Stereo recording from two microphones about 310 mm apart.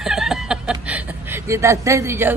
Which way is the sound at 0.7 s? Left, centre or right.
Centre.